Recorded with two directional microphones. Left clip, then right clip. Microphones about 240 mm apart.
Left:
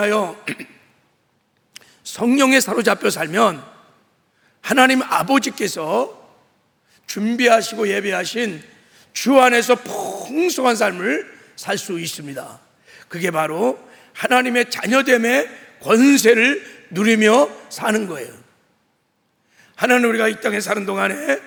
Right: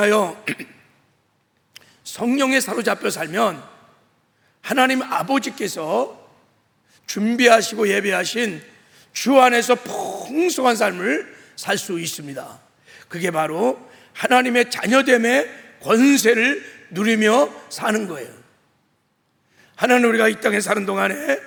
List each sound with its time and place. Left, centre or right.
0.0 s a man's voice: right
0.4 s a man's voice: centre
1.7 s a man's voice: centre
4.6 s a man's voice: left
6.9 s a man's voice: centre
19.5 s a man's voice: centre